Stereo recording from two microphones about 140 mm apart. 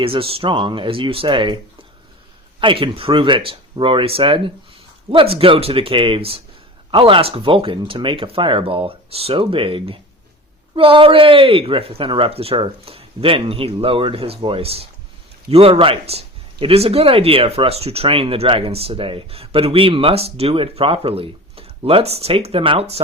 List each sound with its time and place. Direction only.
0.0 s speech: 40° right (ahead or behind)
2.6 s speech: 35° right (ahead or behind)